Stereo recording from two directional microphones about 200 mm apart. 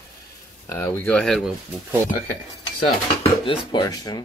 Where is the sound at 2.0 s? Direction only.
45° left (ahead or behind).